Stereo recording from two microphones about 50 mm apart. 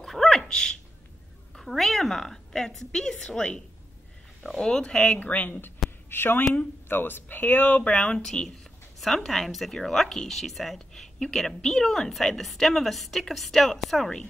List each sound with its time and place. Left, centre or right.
0.0 s a sound: centre
0.4 s speech: centre
1.6 s a woman's voice: centre
4.6 s speech: centre
5.2 s speech: left
6.0 s speech: left
7.7 s a woman's voice: left; by 14.2 s centre